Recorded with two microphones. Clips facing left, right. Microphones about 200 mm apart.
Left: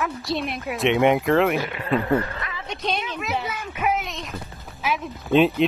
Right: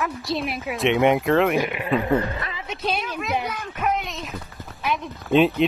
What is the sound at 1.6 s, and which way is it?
A woman's voice, 15° right (ahead or behind).